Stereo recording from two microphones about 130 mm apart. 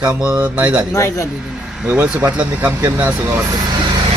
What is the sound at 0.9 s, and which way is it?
Speech, 20° left (ahead or behind).